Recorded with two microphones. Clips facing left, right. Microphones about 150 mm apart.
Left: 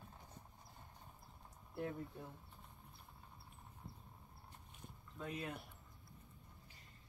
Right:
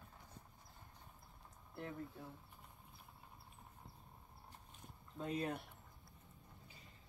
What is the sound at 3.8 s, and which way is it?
Horse, 15° right (ahead or behind).